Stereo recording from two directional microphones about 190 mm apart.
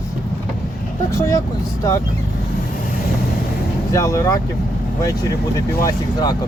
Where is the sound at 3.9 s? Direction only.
15° left (ahead or behind).